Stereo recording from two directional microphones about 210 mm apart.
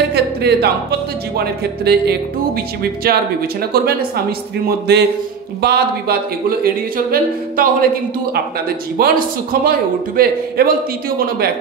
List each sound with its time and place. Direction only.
0.1 s music: 50° right (ahead or behind)
1.3 s a man's voice: 50° right (ahead or behind)
4.6 s a man's voice: 50° right (ahead or behind)